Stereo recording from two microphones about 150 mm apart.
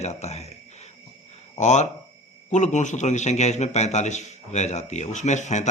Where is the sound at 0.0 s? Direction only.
50° left (ahead or behind).